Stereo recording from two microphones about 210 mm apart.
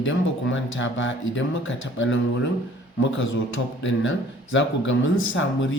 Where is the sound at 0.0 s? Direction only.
65° left (ahead or behind).